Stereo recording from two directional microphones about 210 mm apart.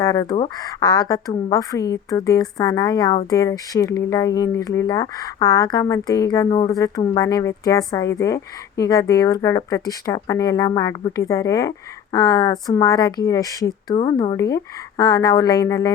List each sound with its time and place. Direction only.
0.0 s speech: 15° left (ahead or behind)